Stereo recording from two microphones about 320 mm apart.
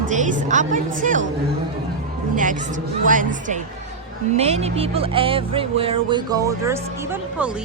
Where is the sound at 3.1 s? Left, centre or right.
Right.